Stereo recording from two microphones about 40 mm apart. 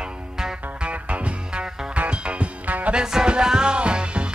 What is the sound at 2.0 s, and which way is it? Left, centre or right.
Music, right.